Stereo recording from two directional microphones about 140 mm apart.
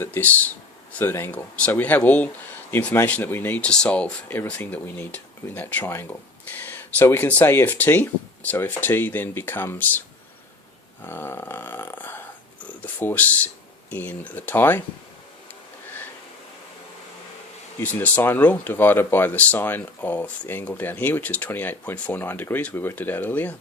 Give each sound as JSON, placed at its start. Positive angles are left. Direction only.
{"t": 0.0, "sound": "speech", "side_deg": 15}
{"t": 11.0, "sound": "speech", "side_deg": 15}
{"t": 17.7, "sound": "speech", "side_deg": 10}